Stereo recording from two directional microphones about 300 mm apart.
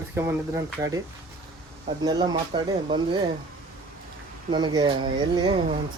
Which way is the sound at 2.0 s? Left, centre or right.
Centre.